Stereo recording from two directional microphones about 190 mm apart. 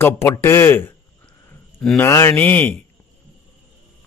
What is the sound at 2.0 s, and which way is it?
Speech, 15° left (ahead or behind).